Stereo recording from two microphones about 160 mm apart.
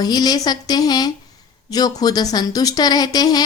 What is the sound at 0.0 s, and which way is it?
Speech, 25° left (ahead or behind).